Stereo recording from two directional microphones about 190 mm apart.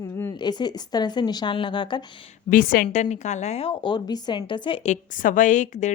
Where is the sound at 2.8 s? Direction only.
35° left (ahead or behind).